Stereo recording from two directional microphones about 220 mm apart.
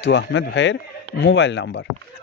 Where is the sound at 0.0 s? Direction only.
55° left (ahead or behind).